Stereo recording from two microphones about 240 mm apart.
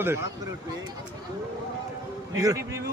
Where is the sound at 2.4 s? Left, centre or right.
Centre.